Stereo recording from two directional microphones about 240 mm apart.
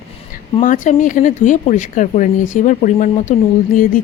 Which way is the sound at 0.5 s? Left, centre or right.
Left.